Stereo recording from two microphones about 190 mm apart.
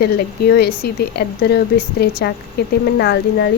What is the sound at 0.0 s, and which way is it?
A woman's voice, 55° left (ahead or behind).